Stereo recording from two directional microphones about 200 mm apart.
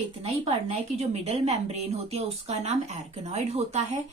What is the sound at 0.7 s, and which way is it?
A woman's voice, 30° right (ahead or behind).